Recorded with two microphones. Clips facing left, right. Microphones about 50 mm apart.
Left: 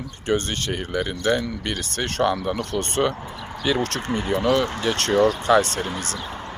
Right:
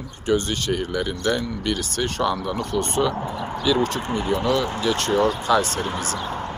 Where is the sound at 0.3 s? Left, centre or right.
Left.